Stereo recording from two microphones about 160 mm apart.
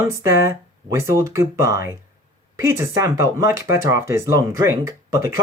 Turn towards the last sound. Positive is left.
turn(degrees=-20)  # may be behind; listen again after turning